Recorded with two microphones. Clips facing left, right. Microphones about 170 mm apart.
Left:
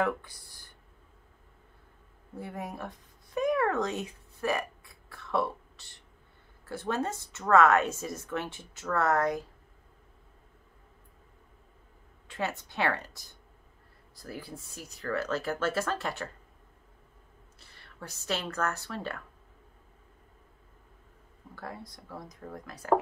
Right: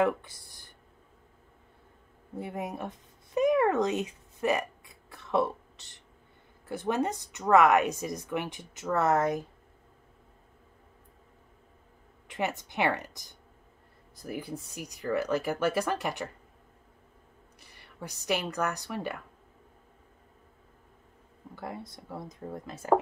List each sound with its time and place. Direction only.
0.0 s speech: 20° right (ahead or behind)
2.3 s speech: 20° right (ahead or behind)
3.3 s a sound: 20° right (ahead or behind)
6.7 s a woman's voice: 15° right (ahead or behind)
12.3 s a woman's voice: 15° right (ahead or behind)
17.6 s a woman's voice: 15° right (ahead or behind)
21.5 s speech: 20° right (ahead or behind)